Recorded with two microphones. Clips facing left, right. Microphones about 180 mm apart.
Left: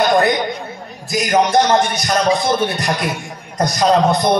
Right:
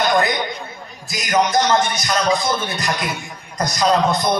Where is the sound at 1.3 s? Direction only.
30° left (ahead or behind).